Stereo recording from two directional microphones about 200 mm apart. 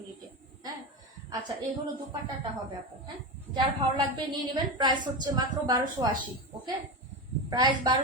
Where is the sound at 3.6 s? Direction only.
20° right (ahead or behind).